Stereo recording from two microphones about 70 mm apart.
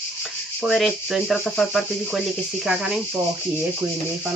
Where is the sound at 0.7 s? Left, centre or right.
Centre.